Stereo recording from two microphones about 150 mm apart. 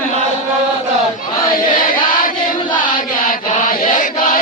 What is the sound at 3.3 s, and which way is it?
Chant, 60° left (ahead or behind).